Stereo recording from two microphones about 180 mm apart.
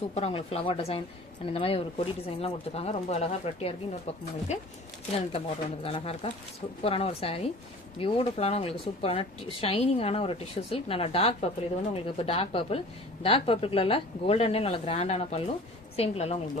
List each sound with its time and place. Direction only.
0.1 s speech: 35° left (ahead or behind)
5.3 s speech: 30° left (ahead or behind)